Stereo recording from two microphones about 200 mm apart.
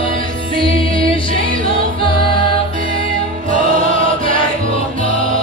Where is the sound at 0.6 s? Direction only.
25° left (ahead or behind).